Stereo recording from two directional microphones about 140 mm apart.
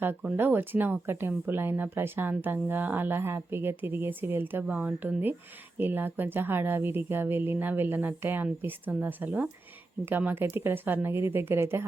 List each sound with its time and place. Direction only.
0.0 s speech: 10° right (ahead or behind)